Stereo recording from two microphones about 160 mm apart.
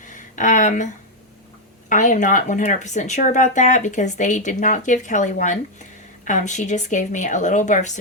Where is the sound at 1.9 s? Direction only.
55° left (ahead or behind).